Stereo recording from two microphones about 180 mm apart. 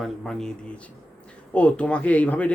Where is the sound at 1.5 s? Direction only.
5° left (ahead or behind).